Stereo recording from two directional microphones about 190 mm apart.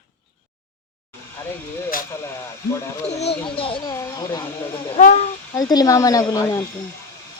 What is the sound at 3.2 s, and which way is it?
Speech, 30° left (ahead or behind).